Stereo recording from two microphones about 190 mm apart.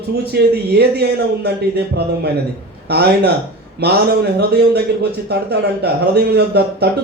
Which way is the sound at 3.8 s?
60° right (ahead or behind).